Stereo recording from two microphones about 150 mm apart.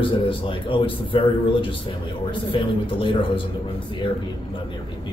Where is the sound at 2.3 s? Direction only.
35° left (ahead or behind).